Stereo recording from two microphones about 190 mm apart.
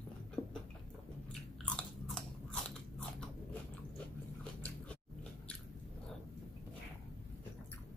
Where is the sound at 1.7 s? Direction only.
5° left (ahead or behind).